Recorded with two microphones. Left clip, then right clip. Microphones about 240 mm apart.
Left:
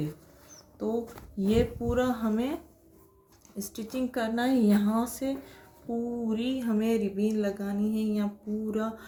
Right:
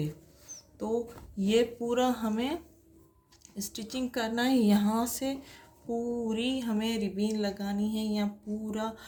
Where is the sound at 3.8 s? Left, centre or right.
Right.